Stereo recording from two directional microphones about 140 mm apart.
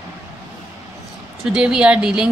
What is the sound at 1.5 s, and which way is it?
Speech, 5° right (ahead or behind).